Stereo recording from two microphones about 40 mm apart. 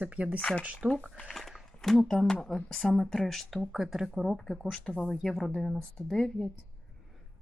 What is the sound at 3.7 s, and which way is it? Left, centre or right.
Speech, centre.